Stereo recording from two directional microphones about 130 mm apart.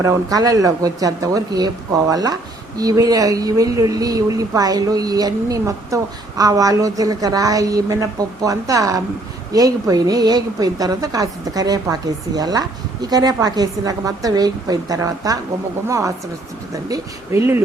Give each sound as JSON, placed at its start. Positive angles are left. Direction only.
{"t": 0.0, "sound": "speech", "side_deg": -25}